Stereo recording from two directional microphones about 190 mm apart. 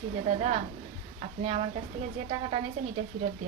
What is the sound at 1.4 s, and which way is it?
Speech, 35° right (ahead or behind).